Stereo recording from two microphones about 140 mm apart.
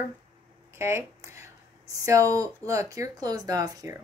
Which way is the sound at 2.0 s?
25° right (ahead or behind).